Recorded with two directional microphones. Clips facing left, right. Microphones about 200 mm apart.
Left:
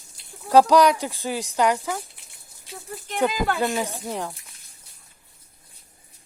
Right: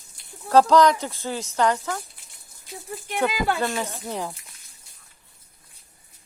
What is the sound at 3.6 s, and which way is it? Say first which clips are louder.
Speech: left 2 dB; 15° left (ahead or behind).